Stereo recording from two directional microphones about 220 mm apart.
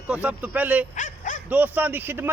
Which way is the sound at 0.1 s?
5° right (ahead or behind).